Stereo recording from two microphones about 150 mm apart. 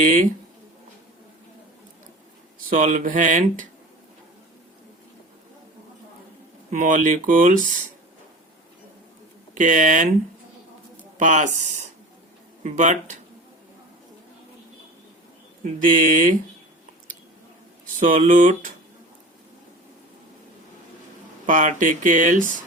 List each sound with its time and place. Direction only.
0.0 s speech: 60° right (ahead or behind)
2.6 s speech: 60° right (ahead or behind)
6.7 s speech: 60° right (ahead or behind)
9.6 s speech: 55° right (ahead or behind)
11.2 s speech: 55° right (ahead or behind)
15.8 s speech: 60° right (ahead or behind)
18.0 s speech: 60° right (ahead or behind)
21.4 s speech: 60° right (ahead or behind)